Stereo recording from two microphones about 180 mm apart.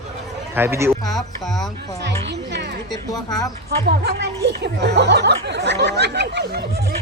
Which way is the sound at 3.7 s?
65° right (ahead or behind).